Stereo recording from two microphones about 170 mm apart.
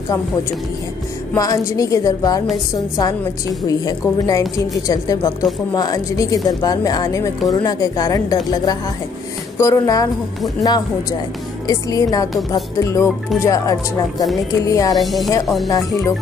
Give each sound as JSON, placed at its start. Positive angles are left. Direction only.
{"t": 1.3, "sound": "a woman's voice", "side_deg": 20}
{"t": 3.6, "sound": "a woman's voice", "side_deg": 20}
{"t": 15.0, "sound": "speech", "side_deg": 0}
{"t": 15.7, "sound": "a woman's voice", "side_deg": 20}